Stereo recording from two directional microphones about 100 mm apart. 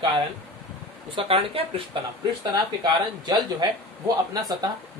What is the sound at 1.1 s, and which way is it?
Speech, 65° right (ahead or behind).